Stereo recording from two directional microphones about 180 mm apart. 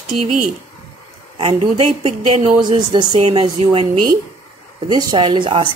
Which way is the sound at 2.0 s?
30° right (ahead or behind).